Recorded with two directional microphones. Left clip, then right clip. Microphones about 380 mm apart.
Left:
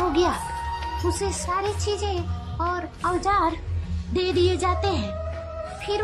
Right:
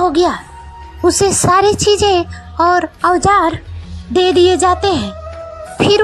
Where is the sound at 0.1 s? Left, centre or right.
Centre.